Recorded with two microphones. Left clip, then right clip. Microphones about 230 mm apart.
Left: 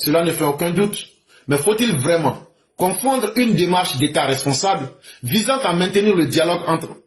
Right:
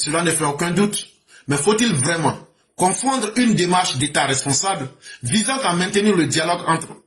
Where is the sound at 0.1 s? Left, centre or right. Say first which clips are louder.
Left 4 dB; right.